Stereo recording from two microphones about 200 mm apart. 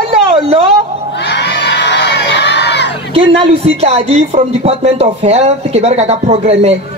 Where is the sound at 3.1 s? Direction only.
30° right (ahead or behind).